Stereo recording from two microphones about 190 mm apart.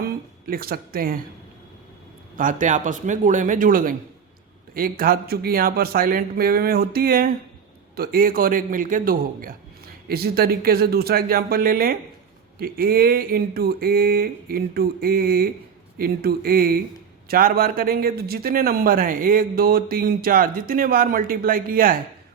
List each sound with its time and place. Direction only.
0.0 s speech: 50° right (ahead or behind)
2.3 s a man's voice: 45° right (ahead or behind)